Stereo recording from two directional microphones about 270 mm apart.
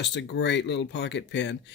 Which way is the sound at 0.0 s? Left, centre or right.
Left.